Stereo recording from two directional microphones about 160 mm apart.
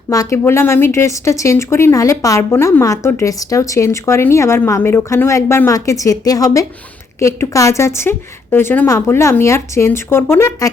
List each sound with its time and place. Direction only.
0.1 s a woman's voice: 20° left (ahead or behind)